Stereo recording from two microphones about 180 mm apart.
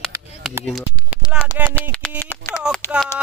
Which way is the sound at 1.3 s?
5° right (ahead or behind).